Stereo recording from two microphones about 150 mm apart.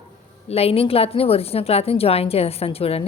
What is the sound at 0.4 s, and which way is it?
A woman's voice, 40° left (ahead or behind).